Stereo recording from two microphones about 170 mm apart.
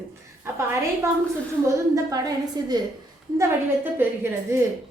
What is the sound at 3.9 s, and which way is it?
Speech, 15° right (ahead or behind).